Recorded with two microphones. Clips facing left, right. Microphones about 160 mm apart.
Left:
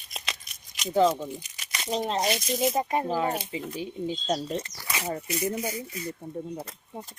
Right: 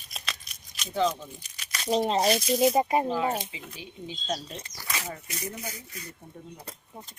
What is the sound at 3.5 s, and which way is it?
Speech, 40° left (ahead or behind).